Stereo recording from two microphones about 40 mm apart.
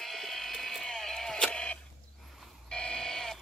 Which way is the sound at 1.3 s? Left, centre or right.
Left.